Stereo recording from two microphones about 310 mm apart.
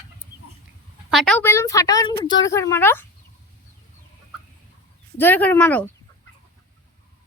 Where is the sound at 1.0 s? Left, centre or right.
Centre.